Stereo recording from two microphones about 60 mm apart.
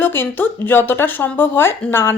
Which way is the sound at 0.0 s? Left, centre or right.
Left.